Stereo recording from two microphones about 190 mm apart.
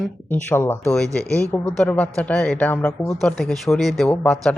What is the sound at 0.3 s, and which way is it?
Speech, 10° left (ahead or behind).